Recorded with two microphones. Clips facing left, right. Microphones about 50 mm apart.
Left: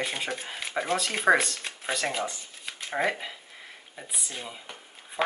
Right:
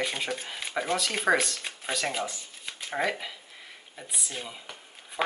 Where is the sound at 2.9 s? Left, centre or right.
Centre.